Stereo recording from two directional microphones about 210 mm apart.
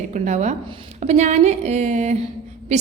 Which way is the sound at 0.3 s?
35° right (ahead or behind).